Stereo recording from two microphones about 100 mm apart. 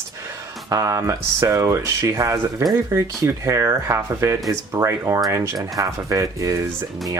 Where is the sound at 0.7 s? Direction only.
35° right (ahead or behind).